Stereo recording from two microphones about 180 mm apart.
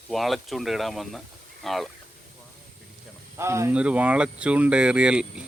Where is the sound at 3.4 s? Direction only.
15° right (ahead or behind).